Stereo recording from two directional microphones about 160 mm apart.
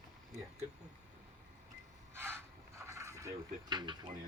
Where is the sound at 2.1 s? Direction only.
15° right (ahead or behind).